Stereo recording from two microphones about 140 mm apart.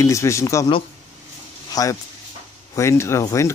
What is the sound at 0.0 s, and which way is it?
Speech, 20° left (ahead or behind).